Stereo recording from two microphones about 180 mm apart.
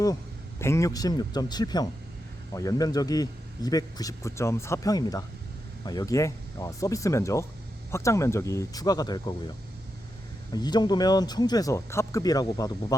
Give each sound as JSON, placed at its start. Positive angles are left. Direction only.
{"t": 0.6, "sound": "a man's voice", "side_deg": 15}
{"t": 10.5, "sound": "a man's voice", "side_deg": 25}